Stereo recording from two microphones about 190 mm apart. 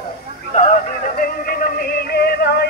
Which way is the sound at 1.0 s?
50° left (ahead or behind).